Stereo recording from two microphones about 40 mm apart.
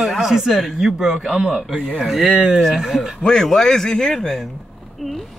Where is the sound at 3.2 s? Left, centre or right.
Centre.